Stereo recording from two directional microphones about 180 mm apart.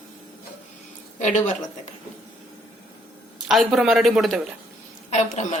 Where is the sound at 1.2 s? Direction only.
40° left (ahead or behind).